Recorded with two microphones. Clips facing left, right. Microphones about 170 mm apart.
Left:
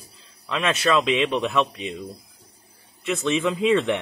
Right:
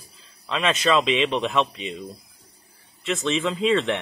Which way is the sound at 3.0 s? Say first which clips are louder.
Left 1 dB; 15° left (ahead or behind).